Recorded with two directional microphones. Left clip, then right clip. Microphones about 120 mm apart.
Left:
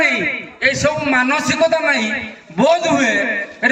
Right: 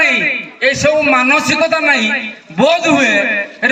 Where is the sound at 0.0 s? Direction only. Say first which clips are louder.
Right 4 dB; 30° right (ahead or behind).